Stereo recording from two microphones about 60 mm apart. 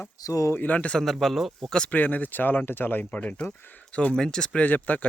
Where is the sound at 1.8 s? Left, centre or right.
Left.